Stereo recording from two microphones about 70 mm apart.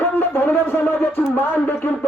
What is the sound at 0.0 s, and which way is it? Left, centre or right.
Speech, left.